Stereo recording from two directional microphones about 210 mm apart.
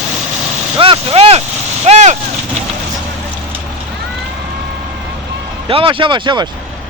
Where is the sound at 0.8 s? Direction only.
25° right (ahead or behind).